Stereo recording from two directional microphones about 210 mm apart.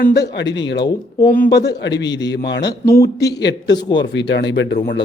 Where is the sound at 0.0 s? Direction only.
55° left (ahead or behind).